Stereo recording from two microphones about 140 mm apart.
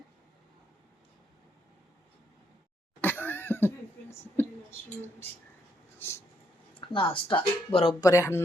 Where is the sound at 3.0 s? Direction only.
15° left (ahead or behind).